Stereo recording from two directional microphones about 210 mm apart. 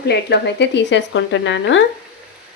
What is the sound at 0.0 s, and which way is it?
Speech, 50° left (ahead or behind).